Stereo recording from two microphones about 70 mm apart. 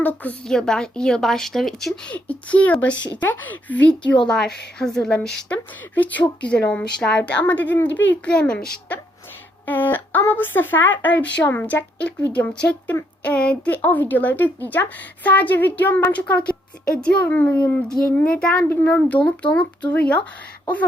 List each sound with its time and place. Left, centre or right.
0.0 s a woman's voice: left
0.4 s speech: centre
2.0 s a woman's voice: centre
5.9 s a woman's voice: left